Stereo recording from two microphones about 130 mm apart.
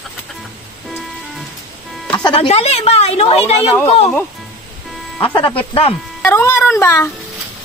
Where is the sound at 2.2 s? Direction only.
40° left (ahead or behind).